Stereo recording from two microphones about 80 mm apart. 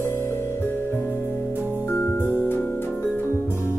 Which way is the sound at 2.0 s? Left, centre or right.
Left.